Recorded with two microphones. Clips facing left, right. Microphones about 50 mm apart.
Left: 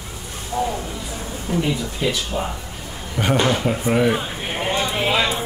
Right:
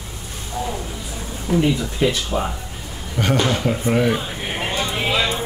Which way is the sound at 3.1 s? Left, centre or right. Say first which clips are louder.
Left 1 dB; centre.